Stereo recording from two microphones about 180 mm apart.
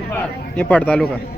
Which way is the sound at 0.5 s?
10° left (ahead or behind).